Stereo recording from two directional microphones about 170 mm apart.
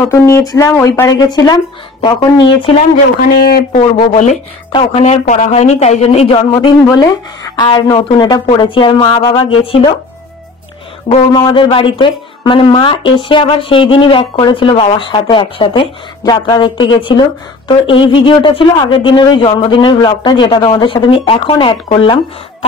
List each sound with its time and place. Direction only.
0.1 s speech: 20° left (ahead or behind)
3.3 s speech: 65° left (ahead or behind)
3.7 s speech: 45° left (ahead or behind)
7.0 s speech: 25° left (ahead or behind)
11.3 s speech: 30° left (ahead or behind)